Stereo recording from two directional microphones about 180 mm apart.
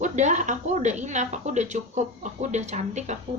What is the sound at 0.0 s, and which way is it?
Speech, 40° right (ahead or behind).